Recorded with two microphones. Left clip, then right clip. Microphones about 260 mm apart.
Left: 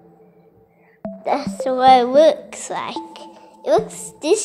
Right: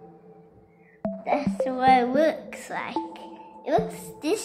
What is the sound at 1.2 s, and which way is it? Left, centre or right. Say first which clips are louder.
A woman's voice: left 5 dB; left.